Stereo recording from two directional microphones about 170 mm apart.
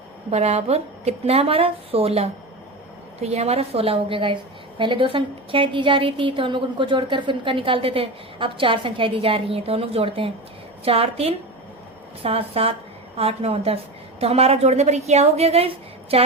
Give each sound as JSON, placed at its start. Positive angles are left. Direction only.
{"t": 0.3, "sound": "a woman's voice", "side_deg": -40}